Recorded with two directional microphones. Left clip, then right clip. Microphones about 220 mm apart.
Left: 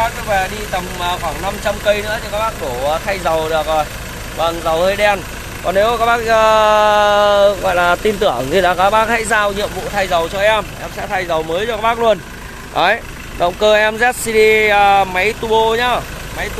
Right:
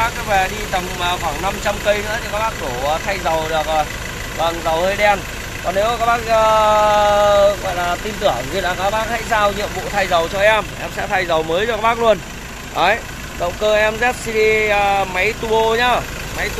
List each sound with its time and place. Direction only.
0.0 s speech: 10° left (ahead or behind)
2.9 s speech: 25° left (ahead or behind); by 9.2 s 50° left (ahead or behind)
9.6 s speech: 15° left (ahead or behind)
12.7 s speech: 30° left (ahead or behind); by 16.4 s 10° left (ahead or behind)